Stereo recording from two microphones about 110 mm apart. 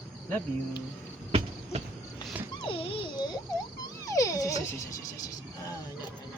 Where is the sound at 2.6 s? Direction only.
55° left (ahead or behind).